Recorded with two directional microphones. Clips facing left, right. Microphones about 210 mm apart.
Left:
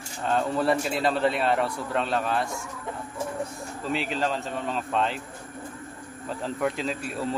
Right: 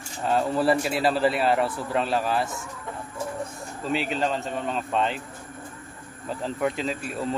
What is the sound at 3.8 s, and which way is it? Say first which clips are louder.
A man's voice: right 2 dB; centre (ahead or behind).